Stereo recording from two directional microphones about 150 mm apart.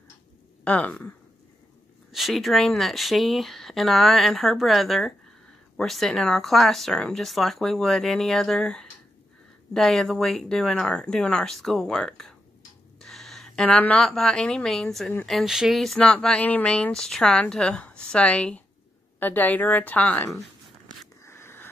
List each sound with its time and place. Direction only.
0.7 s a woman's voice: 10° left (ahead or behind)
2.1 s a woman's voice: centre (ahead or behind)
21.2 s a sound: 15° left (ahead or behind)